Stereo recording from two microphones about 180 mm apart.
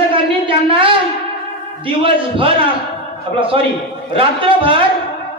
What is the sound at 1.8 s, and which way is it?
A man's voice, 30° right (ahead or behind).